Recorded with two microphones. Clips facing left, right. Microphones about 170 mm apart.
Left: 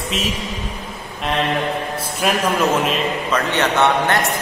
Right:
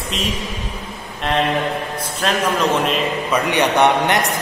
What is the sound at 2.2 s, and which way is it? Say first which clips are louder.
Speech: left 1 dB; 10° left (ahead or behind).